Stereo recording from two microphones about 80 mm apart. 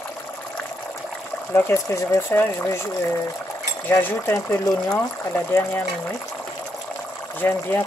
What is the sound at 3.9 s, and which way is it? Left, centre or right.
Speech, left.